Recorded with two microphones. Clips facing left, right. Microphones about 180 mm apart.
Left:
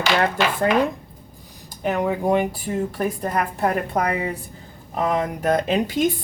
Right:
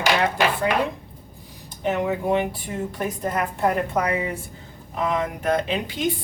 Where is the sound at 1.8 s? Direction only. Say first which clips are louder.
Left 2 dB; 45° left (ahead or behind).